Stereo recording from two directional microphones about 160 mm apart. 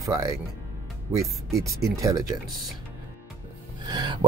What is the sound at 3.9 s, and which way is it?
Speech, 25° right (ahead or behind).